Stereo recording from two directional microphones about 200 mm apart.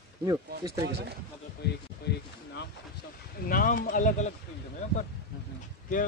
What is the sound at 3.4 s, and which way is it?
Speech, 45° left (ahead or behind).